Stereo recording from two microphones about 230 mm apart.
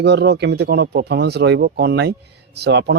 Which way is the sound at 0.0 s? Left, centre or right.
Right.